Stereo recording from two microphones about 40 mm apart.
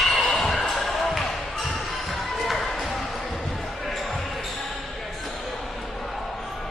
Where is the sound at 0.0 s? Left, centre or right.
Centre.